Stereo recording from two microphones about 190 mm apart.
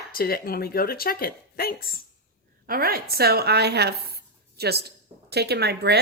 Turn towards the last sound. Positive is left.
turn(degrees=-60)  # may be behind; listen again after turning